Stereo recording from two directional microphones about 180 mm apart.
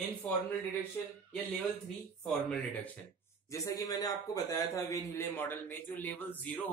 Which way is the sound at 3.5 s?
20° left (ahead or behind).